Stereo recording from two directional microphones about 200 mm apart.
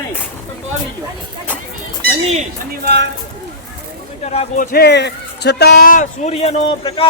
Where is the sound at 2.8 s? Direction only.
60° right (ahead or behind).